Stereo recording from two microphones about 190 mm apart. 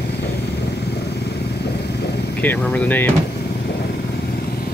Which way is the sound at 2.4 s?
10° left (ahead or behind).